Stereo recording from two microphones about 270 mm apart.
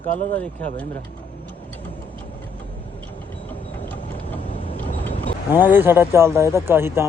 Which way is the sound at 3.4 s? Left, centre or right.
Centre.